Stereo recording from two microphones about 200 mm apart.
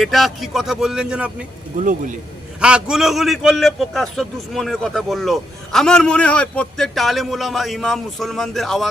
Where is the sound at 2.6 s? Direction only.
5° right (ahead or behind).